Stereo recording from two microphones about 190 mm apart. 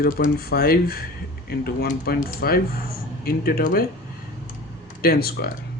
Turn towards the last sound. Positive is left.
turn(degrees=55)  # may be behind; listen again after turning